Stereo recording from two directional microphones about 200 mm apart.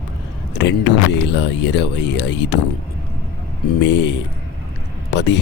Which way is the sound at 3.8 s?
60° left (ahead or behind).